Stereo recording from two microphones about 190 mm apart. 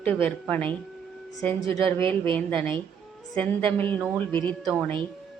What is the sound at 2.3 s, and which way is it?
A woman's voice, 10° left (ahead or behind).